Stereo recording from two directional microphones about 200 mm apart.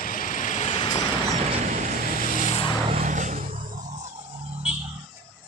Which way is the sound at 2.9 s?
40° right (ahead or behind).